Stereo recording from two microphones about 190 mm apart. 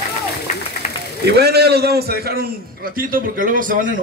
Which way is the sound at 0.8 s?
40° left (ahead or behind).